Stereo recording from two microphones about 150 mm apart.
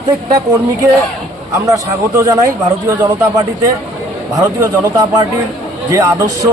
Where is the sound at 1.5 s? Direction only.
20° right (ahead or behind).